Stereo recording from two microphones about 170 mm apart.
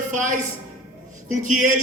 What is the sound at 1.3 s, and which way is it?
Speech, 45° right (ahead or behind).